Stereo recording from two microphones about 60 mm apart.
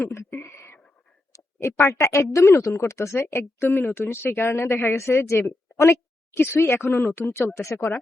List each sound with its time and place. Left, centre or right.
0.1 s whispering: left
1.5 s speech: left
2.4 s speech: left
3.2 s a woman's voice: left
7.6 s a woman's voice: left